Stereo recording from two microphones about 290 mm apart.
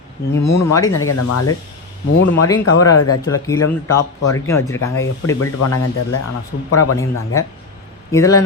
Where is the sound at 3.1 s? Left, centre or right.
Centre.